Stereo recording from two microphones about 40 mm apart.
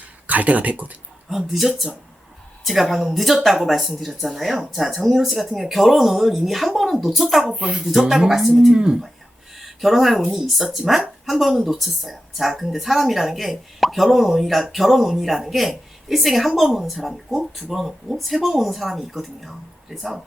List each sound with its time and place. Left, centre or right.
0.3 s speech: right
1.3 s speech: centre
4.9 s speech: centre
7.5 s speech: right
8.3 s speech: centre
8.7 s speech: right
9.6 s speech: centre